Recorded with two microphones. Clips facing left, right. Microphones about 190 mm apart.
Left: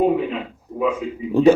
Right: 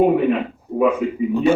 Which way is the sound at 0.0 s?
60° right (ahead or behind).